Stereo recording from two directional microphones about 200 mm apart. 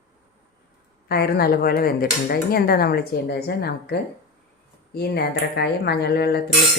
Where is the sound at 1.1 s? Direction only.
50° left (ahead or behind).